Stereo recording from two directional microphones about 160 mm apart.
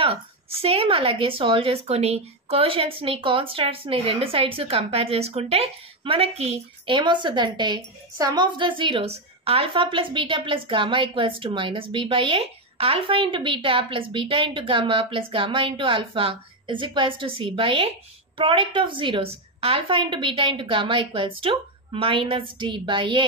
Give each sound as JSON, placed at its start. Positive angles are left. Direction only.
{"t": 0.0, "sound": "a woman's voice", "side_deg": -35}